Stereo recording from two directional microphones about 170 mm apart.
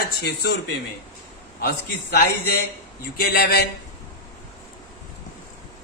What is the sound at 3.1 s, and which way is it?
Speech, 65° left (ahead or behind).